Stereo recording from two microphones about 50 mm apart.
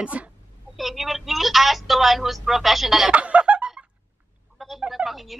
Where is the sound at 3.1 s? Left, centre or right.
Right.